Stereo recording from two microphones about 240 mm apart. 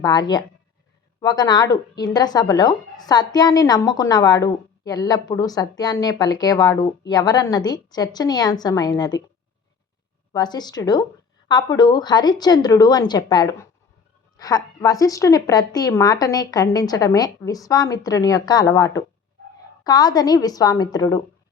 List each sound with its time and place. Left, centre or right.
0.0 s speech: centre
10.3 s speech: centre